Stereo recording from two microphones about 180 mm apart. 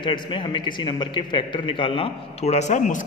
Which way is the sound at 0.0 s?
25° left (ahead or behind).